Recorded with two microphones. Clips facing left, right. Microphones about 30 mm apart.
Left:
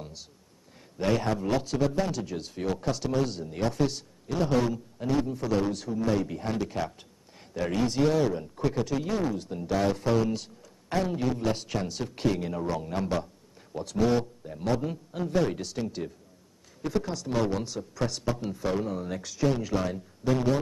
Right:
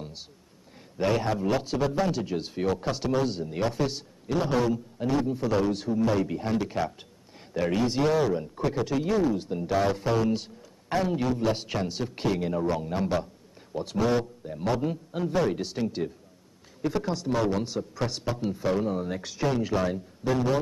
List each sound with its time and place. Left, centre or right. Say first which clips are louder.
1.0 s a man's voice: right 1 dB; centre
2.1 s a man's voice: right 4 dB; right; by 5.7 s centre
5.7 s a man's voice: right 2 dB; centre
10.3 s a sound: right 4 dB; centre
11.1 s a man's voice: right 2 dB; centre
11.5 s a man's voice: right 2 dB; centre
16.8 s a man's voice: right 2 dB; centre